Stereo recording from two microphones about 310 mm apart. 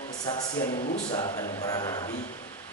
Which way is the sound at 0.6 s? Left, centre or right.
Left.